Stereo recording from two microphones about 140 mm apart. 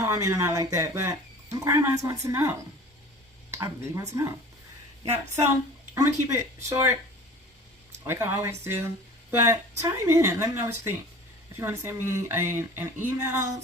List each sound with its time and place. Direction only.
0.0 s speech: 20° right (ahead or behind)
3.5 s speech: 20° right (ahead or behind)
5.9 s speech: 20° right (ahead or behind)
8.0 s a sound: 15° right (ahead or behind)
9.4 s speech: 20° right (ahead or behind)
12.0 s a sound: 20° right (ahead or behind)